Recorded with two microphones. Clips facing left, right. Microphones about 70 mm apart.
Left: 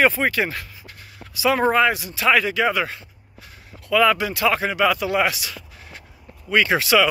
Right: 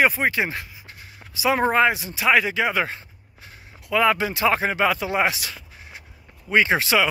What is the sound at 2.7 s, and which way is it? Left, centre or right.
Speech, right.